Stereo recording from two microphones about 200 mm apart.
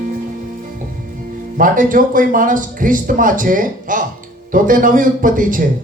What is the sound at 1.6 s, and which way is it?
A man's voice, 40° right (ahead or behind).